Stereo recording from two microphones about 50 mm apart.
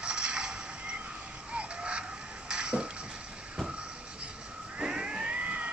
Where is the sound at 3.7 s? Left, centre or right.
Right.